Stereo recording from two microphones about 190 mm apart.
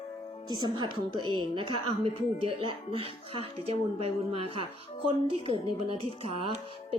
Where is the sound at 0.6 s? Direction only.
25° right (ahead or behind).